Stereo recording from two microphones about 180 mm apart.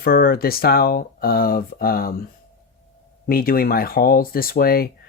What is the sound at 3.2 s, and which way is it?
Speech, 55° left (ahead or behind).